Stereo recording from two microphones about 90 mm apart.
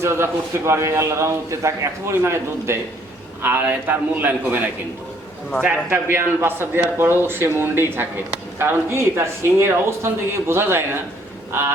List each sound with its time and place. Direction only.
0.0 s a man's voice: 30° right (ahead or behind)